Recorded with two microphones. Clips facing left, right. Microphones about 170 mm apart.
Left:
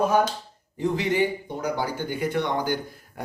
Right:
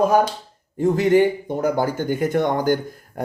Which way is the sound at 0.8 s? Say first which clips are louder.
Right 7 dB; 45° right (ahead or behind).